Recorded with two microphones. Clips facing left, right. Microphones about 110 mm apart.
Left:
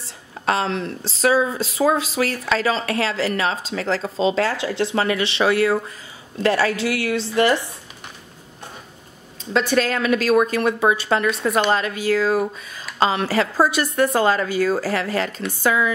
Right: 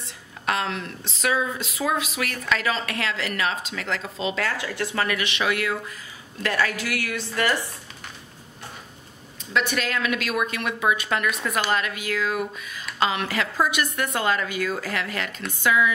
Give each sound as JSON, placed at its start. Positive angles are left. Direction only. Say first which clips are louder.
{"t": 0.0, "sound": "a woman's voice", "louder": "left 5 dB", "side_deg": 30}
{"t": 9.5, "sound": "speech", "louder": "left 6 dB", "side_deg": 30}